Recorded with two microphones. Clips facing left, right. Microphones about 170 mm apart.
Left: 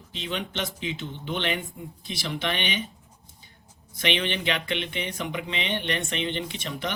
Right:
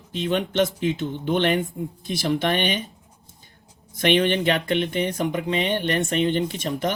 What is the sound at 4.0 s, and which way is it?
Speech, 45° right (ahead or behind).